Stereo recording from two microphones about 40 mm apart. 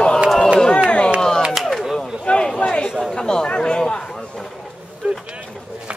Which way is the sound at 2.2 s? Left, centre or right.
Left.